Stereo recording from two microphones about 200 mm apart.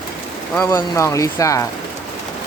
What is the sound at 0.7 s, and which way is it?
Speech, 15° left (ahead or behind).